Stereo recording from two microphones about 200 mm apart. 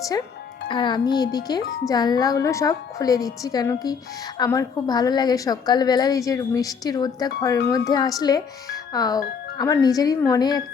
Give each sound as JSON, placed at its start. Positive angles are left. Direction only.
{"t": 0.7, "sound": "a woman's voice", "side_deg": 20}